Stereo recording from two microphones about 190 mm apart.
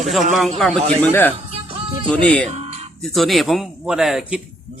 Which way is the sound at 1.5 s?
30° right (ahead or behind).